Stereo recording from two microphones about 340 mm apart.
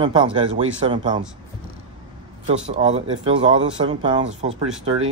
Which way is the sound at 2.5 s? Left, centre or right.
Centre.